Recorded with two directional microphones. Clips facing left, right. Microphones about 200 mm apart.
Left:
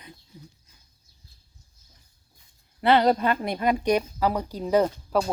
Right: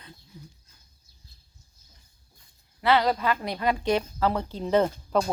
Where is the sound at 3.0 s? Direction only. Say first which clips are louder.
Left 4 dB; 30° left (ahead or behind).